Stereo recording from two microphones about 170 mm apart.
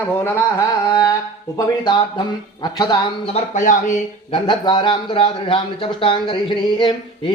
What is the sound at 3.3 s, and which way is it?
Speech, 45° left (ahead or behind).